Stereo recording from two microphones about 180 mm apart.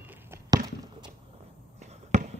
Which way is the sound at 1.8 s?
40° right (ahead or behind).